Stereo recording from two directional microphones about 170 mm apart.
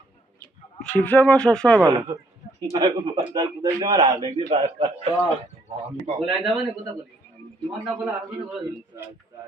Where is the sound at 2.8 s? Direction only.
20° right (ahead or behind).